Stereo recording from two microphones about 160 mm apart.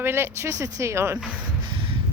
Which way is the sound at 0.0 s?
15° right (ahead or behind).